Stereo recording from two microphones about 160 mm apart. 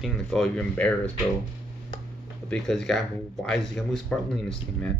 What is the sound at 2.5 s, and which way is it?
Speech, 5° left (ahead or behind).